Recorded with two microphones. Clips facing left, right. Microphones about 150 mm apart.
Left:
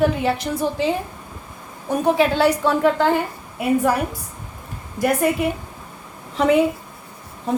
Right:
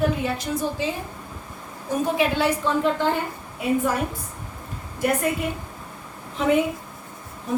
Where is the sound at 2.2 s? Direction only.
75° left (ahead or behind).